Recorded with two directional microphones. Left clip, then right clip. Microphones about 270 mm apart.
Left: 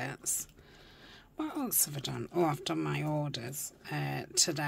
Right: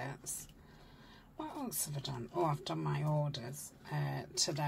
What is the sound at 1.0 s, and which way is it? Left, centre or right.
Speech, left.